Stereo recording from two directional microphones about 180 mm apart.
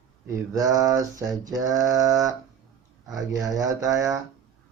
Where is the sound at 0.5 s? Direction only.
20° right (ahead or behind).